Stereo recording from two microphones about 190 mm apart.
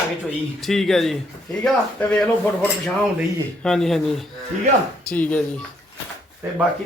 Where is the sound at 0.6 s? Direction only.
Centre (ahead or behind).